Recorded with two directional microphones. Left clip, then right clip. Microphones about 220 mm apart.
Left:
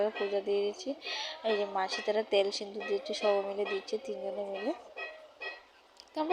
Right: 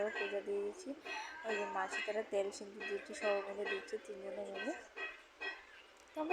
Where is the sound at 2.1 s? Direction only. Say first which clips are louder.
Left 11 dB; 35° left (ahead or behind).